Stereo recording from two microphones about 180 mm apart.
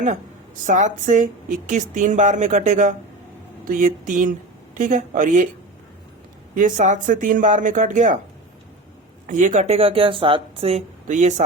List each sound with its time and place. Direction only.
0.7 s speech: 45° right (ahead or behind)
6.5 s speech: 45° right (ahead or behind)
9.2 s speech: 45° right (ahead or behind)